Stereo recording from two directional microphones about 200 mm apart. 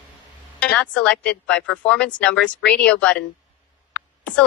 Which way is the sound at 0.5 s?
5° left (ahead or behind).